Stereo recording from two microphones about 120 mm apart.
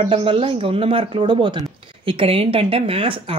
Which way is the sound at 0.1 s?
45° right (ahead or behind).